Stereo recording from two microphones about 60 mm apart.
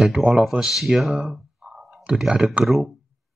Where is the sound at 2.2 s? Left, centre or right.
Centre.